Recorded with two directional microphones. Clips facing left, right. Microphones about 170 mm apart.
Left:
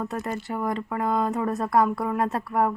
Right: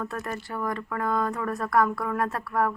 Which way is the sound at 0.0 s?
20° left (ahead or behind).